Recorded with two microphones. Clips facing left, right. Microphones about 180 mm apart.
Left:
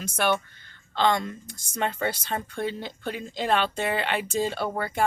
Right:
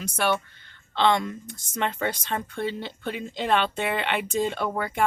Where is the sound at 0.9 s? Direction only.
40° left (ahead or behind).